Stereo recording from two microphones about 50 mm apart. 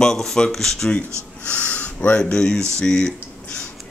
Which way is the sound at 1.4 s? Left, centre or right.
Left.